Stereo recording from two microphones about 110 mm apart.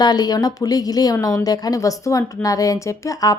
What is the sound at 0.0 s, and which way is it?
A woman's voice, 40° left (ahead or behind).